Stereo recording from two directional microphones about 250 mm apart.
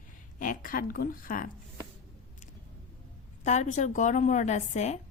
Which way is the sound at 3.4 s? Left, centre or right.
Left.